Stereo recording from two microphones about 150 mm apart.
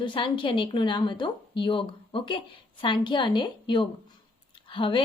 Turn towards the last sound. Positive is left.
turn(degrees=35)  # may be behind; listen again after turning